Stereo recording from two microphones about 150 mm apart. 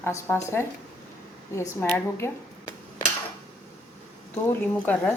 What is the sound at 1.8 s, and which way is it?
Speech, 15° left (ahead or behind).